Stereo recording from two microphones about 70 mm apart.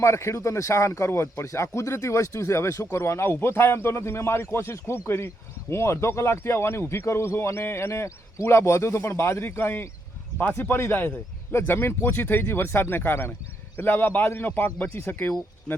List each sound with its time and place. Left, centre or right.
0.0 s a man's voice: left